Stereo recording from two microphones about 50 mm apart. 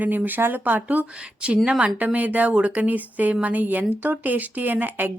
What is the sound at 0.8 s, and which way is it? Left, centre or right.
A woman's voice, right.